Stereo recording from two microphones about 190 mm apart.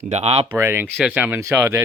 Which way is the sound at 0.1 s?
35° right (ahead or behind).